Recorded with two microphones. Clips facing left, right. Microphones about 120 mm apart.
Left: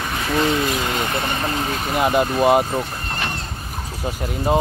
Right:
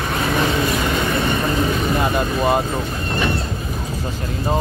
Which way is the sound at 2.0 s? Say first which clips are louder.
Left 7 dB; 15° left (ahead or behind).